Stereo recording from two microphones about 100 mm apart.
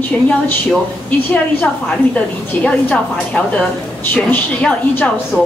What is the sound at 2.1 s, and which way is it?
A woman's voice, 10° left (ahead or behind).